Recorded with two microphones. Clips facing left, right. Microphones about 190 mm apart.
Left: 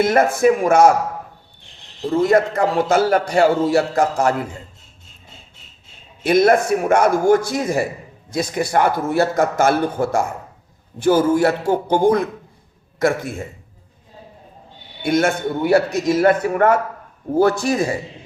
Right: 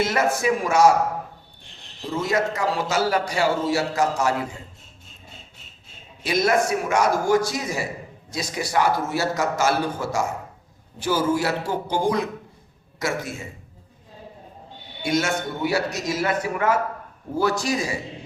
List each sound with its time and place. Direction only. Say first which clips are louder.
0.0 s a man's voice: left 7 dB; 55° left (ahead or behind)
2.1 s a man's voice: left 8 dB; 55° left (ahead or behind)
6.2 s a man's voice: left 7 dB; 55° left (ahead or behind)
15.0 s a man's voice: left 6 dB; 55° left (ahead or behind)